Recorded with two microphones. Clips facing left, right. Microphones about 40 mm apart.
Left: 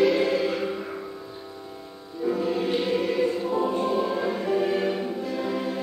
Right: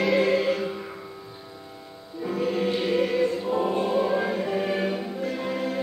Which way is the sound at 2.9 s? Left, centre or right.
Right.